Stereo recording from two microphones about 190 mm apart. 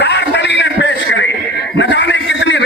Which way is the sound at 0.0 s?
65° left (ahead or behind).